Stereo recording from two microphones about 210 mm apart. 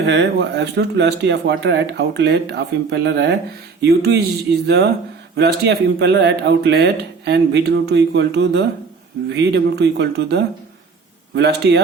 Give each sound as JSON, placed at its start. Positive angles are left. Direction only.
{"t": 0.0, "sound": "speech", "side_deg": -55}